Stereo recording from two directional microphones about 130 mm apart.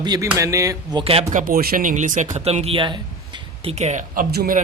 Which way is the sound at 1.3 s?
85° right.